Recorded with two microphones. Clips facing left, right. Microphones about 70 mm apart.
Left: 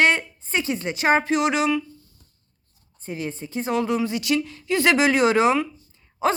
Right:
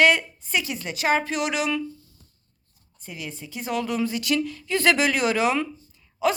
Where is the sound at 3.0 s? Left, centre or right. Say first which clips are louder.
Left 6 dB; left.